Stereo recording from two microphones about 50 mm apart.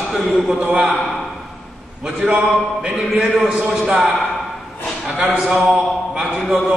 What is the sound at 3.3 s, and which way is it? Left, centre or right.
Speech, centre.